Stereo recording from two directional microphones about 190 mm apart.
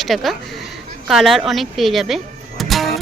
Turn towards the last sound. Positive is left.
turn(degrees=0)  # may be behind; listen again after turning